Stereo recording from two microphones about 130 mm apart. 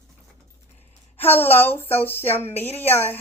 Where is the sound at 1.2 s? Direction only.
15° left (ahead or behind).